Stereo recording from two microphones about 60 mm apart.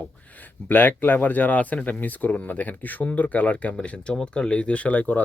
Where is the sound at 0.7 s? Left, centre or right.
Left.